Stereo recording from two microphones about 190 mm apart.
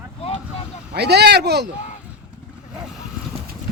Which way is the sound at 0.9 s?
60° right (ahead or behind).